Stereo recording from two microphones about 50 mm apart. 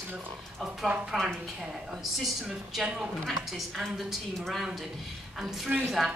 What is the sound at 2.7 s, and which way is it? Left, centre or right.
A woman's voice, centre.